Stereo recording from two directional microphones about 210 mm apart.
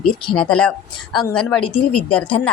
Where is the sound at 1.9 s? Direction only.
90° left.